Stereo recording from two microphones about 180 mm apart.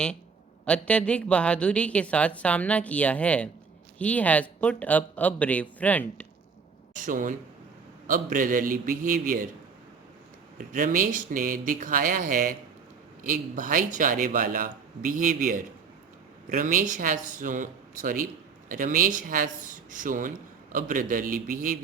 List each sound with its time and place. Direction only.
0.6 s a woman's voice: 5° left (ahead or behind)
6.9 s a man's voice: 45° right (ahead or behind)
10.6 s a man's voice: 50° right (ahead or behind)